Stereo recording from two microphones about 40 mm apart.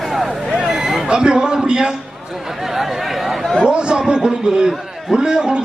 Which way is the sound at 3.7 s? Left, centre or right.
Right.